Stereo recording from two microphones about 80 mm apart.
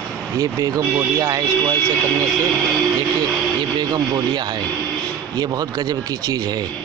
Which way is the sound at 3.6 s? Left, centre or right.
Right.